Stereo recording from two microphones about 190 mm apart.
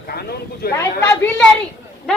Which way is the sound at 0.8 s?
10° left (ahead or behind).